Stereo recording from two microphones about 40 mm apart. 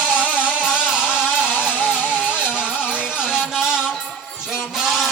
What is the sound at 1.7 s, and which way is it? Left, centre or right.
Music, left.